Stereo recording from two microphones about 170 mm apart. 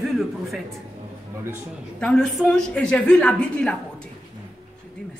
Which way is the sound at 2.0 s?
5° left (ahead or behind).